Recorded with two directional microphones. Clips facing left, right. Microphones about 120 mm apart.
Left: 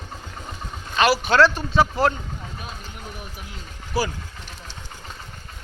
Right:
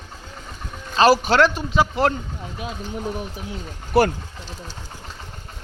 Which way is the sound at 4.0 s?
65° right (ahead or behind).